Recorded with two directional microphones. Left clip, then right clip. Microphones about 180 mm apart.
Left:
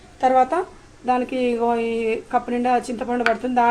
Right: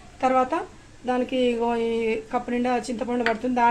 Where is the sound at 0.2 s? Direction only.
20° left (ahead or behind).